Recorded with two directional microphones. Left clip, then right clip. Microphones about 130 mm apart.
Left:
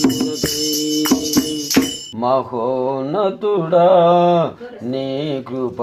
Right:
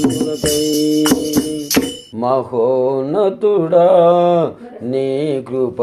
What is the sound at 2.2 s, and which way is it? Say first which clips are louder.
Mantra: right 2 dB; 30° right (ahead or behind).